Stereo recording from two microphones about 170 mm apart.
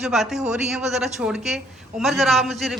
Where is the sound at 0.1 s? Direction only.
Centre (ahead or behind).